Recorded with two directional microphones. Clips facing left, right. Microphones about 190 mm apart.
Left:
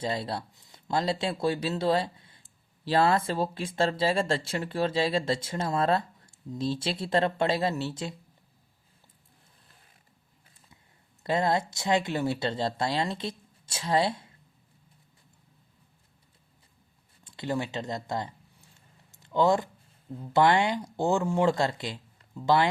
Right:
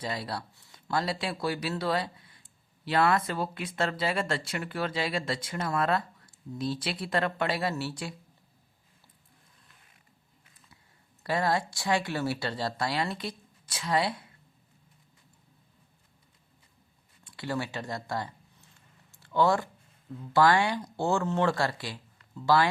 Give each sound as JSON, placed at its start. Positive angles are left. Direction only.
{"t": 0.0, "sound": "speech", "side_deg": 25}
{"t": 9.6, "sound": "a sound", "side_deg": 35}
{"t": 11.2, "sound": "speech", "side_deg": 20}
{"t": 17.2, "sound": "speech", "side_deg": 20}
{"t": 19.1, "sound": "a sound", "side_deg": 20}
{"t": 20.3, "sound": "speech", "side_deg": 20}